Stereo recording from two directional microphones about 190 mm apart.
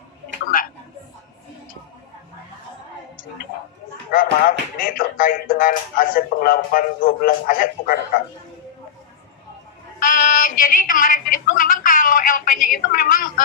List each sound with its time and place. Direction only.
0.5 s a sound: 50° left (ahead or behind)
4.1 s speech: 45° left (ahead or behind)
10.0 s a woman's voice: 45° left (ahead or behind)